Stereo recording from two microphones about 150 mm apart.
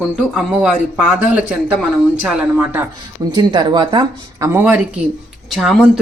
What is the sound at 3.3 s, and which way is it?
Speech, 30° right (ahead or behind).